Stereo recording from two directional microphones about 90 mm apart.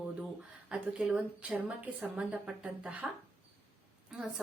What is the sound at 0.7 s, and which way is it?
Speech, 10° right (ahead or behind).